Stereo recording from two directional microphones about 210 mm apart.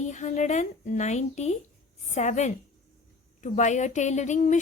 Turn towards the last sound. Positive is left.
turn(degrees=35)  # may be behind; listen again after turning